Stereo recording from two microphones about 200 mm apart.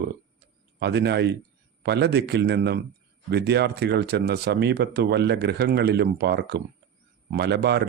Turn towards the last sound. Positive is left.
turn(degrees=-55)  # may be behind; listen again after turning